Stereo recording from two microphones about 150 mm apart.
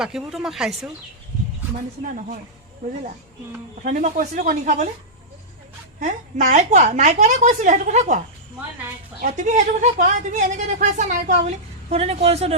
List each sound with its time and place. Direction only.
0.0 s speech: 5° right (ahead or behind)
3.8 s speech: 55° right (ahead or behind)
6.0 s a woman's voice: 55° right (ahead or behind)
9.2 s a woman's voice: 55° right (ahead or behind)